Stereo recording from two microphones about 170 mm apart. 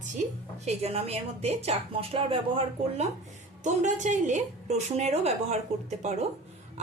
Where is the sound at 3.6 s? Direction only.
45° right (ahead or behind).